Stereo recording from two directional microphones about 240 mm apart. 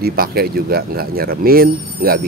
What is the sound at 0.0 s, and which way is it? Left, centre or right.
Speech, right.